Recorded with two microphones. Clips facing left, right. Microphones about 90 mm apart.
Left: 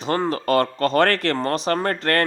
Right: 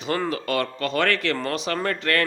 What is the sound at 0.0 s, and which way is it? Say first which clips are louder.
Speech: left 3 dB; 35° left (ahead or behind).